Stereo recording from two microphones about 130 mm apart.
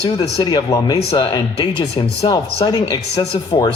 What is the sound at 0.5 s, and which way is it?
A man's voice, 35° left (ahead or behind).